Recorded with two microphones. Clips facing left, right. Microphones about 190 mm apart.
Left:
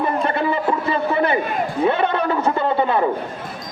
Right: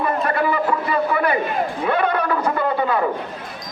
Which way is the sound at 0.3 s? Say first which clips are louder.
Even; 25° left (ahead or behind).